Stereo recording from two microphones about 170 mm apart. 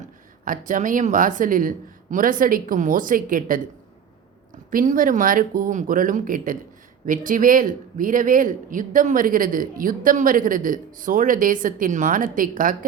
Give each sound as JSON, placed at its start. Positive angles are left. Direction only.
{"t": 0.4, "sound": "a man's voice", "side_deg": -50}
{"t": 4.7, "sound": "a man's voice", "side_deg": -50}